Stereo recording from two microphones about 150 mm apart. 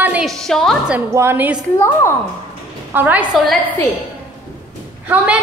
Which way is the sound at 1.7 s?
15° left (ahead or behind).